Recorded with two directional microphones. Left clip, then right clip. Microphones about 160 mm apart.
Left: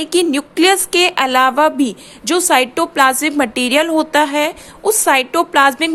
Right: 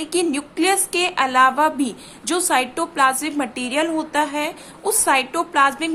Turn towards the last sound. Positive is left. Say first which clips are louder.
# left 6 dB
turn(degrees=45)  # may be behind; listen again after turning